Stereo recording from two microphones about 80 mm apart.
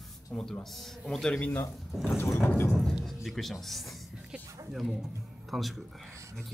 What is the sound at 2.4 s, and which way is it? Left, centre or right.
Music, left.